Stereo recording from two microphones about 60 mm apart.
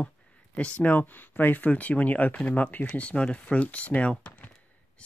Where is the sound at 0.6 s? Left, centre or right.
Left.